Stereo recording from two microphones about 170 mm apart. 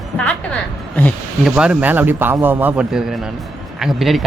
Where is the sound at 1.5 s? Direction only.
5° right (ahead or behind).